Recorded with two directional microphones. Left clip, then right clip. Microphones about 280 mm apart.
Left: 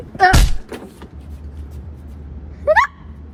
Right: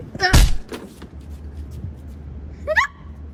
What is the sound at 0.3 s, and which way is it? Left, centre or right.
Thunk, centre.